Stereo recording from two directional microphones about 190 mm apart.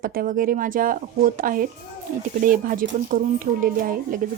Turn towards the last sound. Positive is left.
turn(degrees=-45)  # may be behind; listen again after turning